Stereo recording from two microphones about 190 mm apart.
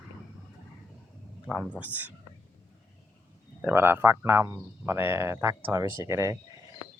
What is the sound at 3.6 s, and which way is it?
Speech, 10° right (ahead or behind).